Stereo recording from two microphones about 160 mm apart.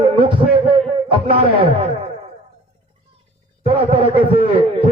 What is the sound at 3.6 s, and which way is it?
A man's voice, 35° right (ahead or behind).